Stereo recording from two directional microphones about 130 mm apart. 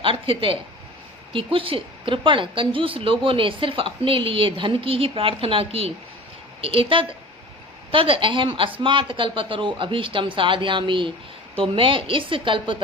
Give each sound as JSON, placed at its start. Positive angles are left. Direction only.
{"t": 0.0, "sound": "a woman's voice", "side_deg": -40}